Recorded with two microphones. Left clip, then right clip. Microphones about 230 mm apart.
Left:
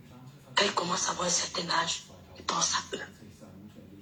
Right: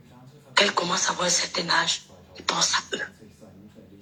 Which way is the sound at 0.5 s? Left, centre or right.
Right.